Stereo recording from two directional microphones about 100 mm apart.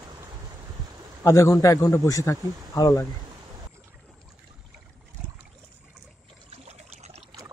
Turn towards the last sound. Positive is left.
turn(degrees=-90)